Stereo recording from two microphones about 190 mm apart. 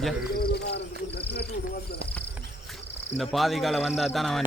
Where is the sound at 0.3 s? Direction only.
55° left (ahead or behind).